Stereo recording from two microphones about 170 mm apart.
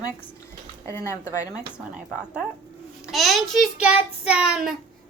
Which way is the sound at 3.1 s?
Centre (ahead or behind).